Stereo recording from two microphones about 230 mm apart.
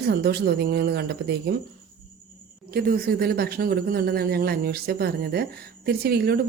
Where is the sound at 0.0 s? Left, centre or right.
Right.